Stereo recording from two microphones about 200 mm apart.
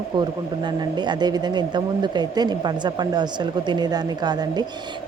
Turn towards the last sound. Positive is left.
turn(degrees=-20)  # may be behind; listen again after turning